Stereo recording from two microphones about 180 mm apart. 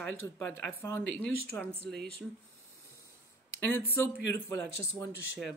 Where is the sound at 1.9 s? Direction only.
65° right (ahead or behind).